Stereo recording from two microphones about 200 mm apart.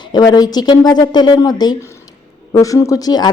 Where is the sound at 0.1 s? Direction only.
20° left (ahead or behind).